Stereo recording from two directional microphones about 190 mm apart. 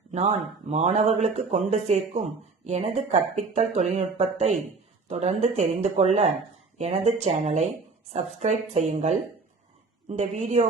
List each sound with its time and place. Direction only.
0.1 s speech: 35° right (ahead or behind)
10.1 s speech: 40° right (ahead or behind)